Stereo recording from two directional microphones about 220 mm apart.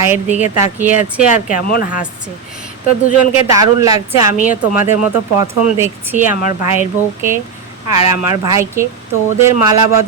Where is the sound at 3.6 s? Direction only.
15° right (ahead or behind).